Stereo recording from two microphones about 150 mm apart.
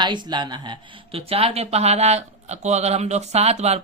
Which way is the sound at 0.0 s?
30° right (ahead or behind).